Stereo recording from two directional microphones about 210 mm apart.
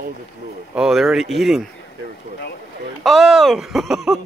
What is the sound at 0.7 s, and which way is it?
Speech, centre (ahead or behind).